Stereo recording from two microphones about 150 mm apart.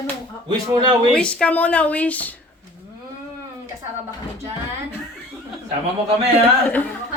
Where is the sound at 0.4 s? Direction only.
30° right (ahead or behind).